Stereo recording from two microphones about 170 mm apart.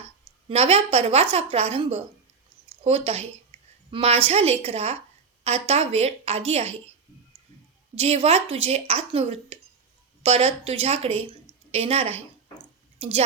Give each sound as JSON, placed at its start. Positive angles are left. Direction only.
{"t": 0.4, "sound": "speech", "side_deg": -35}
{"t": 7.9, "sound": "a woman's voice", "side_deg": -35}